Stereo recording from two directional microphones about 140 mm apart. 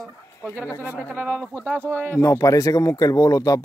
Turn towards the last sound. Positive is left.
turn(degrees=25)  # may be behind; listen again after turning